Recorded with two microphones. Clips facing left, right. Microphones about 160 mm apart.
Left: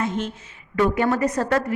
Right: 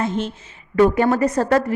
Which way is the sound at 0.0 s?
30° right (ahead or behind).